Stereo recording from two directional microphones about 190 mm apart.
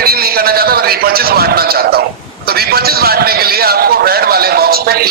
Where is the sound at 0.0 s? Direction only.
55° right (ahead or behind).